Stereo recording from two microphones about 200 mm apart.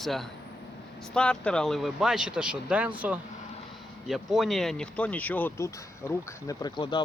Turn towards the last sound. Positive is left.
turn(degrees=20)  # may be behind; listen again after turning